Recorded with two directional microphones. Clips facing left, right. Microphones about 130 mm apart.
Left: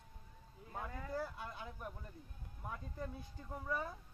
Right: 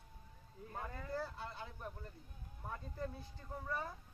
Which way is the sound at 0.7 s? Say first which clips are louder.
Left 1 dB; centre (ahead or behind).